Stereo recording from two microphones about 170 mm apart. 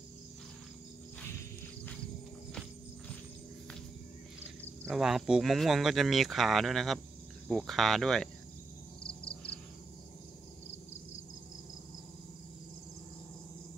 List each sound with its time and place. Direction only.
4.8 s speech: centre (ahead or behind)
9.0 s frog: 30° left (ahead or behind)